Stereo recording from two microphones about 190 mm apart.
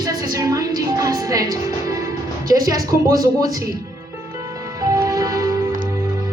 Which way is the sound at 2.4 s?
20° right (ahead or behind).